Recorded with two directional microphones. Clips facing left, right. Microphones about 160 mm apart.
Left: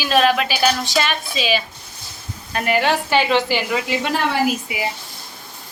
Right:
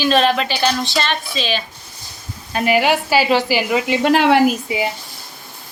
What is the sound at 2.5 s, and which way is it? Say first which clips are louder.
Speech: right 3 dB; 5° right (ahead or behind).